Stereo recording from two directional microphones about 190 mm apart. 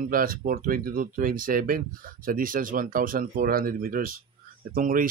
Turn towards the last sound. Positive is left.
turn(degrees=-45)  # may be behind; listen again after turning